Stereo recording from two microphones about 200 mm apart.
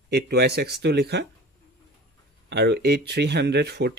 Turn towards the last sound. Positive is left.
turn(degrees=-55)  # may be behind; listen again after turning